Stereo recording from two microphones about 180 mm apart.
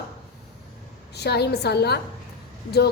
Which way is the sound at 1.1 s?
65° left (ahead or behind).